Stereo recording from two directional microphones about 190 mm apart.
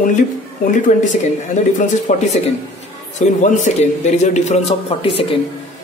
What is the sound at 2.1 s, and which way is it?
A man's voice, 40° left (ahead or behind).